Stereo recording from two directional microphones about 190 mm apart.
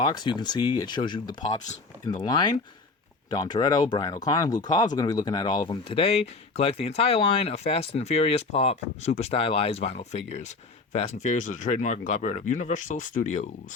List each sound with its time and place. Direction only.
0.0 s speech: 25° left (ahead or behind); by 13.5 s 40° left (ahead or behind)